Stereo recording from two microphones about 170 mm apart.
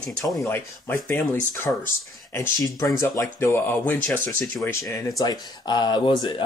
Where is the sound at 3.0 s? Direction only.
15° left (ahead or behind).